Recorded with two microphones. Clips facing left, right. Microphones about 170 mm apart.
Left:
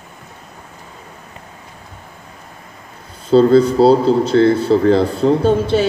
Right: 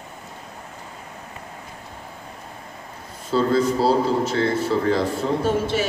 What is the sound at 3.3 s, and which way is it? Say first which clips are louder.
Speech: left 10 dB; 60° left (ahead or behind).